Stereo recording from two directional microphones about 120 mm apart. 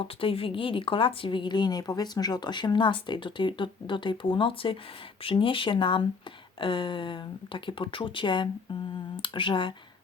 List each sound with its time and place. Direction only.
0.0 s speech: 50° left (ahead or behind)